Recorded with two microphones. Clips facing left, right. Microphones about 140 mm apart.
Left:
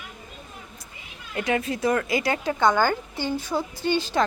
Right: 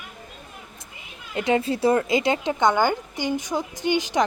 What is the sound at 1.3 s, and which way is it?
A woman's voice, 25° right (ahead or behind).